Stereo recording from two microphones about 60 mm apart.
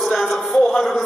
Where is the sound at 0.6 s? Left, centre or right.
Centre.